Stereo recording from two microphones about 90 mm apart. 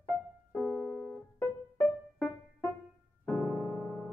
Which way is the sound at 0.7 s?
5° left (ahead or behind).